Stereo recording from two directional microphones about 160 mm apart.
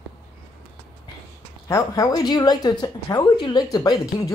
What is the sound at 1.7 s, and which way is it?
Speech, 20° left (ahead or behind).